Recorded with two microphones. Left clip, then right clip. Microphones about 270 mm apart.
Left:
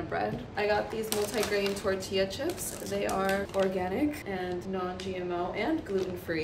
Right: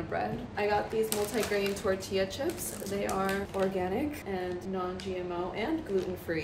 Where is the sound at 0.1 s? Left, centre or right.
Centre.